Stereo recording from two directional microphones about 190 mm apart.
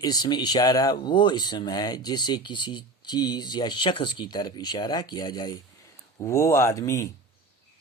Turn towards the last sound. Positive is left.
turn(degrees=15)  # may be behind; listen again after turning